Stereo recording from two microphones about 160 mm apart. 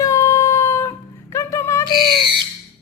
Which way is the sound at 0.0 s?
20° left (ahead or behind).